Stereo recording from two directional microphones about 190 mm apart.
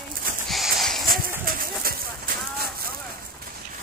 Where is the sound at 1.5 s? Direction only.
50° right (ahead or behind).